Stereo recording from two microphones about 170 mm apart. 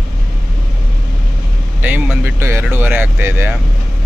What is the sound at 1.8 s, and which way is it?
Vehicle, 10° right (ahead or behind).